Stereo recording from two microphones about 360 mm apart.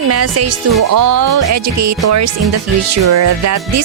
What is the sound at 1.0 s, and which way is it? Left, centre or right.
Speech, right.